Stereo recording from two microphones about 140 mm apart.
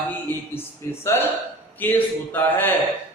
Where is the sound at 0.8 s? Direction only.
20° left (ahead or behind).